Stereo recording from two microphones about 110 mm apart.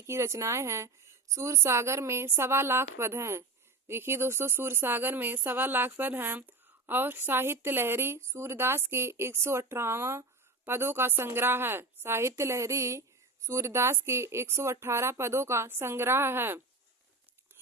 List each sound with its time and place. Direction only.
0.0 s speech: 25° right (ahead or behind)